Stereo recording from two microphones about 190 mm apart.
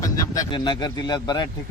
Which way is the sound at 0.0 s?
20° left (ahead or behind).